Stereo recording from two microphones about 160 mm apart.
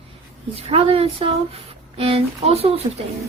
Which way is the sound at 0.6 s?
35° right (ahead or behind).